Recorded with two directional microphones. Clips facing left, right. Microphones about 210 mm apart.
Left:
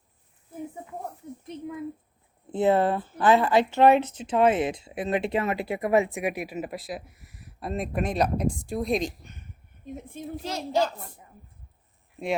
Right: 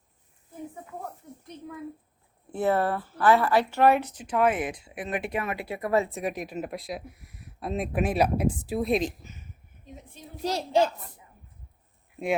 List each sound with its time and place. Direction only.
1.5 s speech: 20° left (ahead or behind); by 9.5 s 5° right (ahead or behind)
9.8 s a woman's voice: 50° left (ahead or behind)
10.4 s a child's voice: 35° right (ahead or behind)